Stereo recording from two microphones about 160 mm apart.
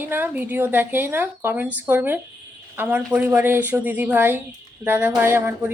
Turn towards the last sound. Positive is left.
turn(degrees=-15)  # may be behind; listen again after turning